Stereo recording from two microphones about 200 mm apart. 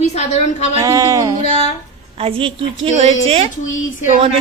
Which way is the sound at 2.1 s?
25° right (ahead or behind).